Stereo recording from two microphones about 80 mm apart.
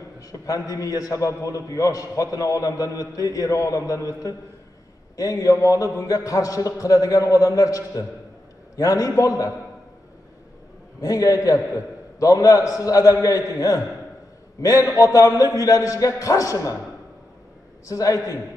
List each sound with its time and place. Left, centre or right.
0.7 s a man's voice: left
11.0 s a man's voice: left
17.8 s a man's voice: left